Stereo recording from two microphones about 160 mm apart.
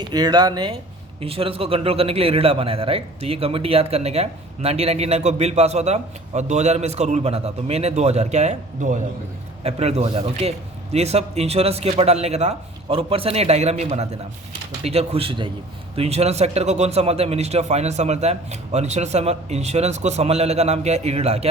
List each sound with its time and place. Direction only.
0.1 s a man's voice: 25° right (ahead or behind); by 21.5 s 40° right (ahead or behind)